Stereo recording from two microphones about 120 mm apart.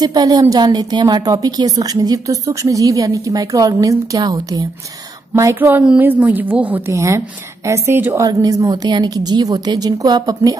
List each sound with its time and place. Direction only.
0.0 s a woman's voice: 35° right (ahead or behind); by 6.8 s 15° right (ahead or behind)
6.9 s a woman's voice: 25° right (ahead or behind)